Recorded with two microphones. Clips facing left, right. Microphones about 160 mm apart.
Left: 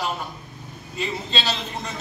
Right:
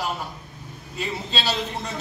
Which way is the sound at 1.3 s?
5° right (ahead or behind).